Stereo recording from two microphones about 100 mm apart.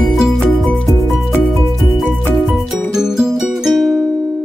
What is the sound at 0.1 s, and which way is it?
Music, centre (ahead or behind).